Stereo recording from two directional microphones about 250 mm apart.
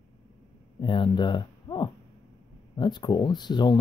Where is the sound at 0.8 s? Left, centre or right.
Centre.